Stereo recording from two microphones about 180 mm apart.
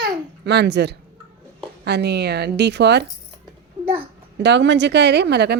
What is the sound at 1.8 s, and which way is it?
Speech, 70° right (ahead or behind).